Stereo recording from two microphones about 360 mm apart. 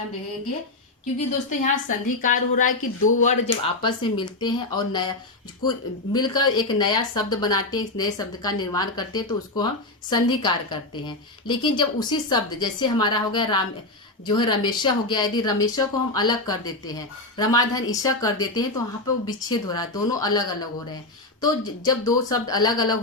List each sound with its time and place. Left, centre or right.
1.5 s a woman's voice: left
6.1 s a woman's voice: centre